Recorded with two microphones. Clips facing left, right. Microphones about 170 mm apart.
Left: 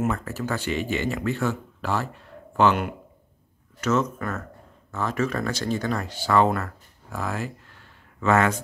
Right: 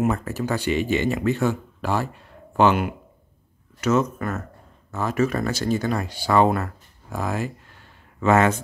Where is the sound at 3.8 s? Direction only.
10° right (ahead or behind).